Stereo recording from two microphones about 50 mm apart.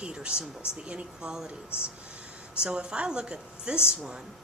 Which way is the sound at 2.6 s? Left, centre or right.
Centre.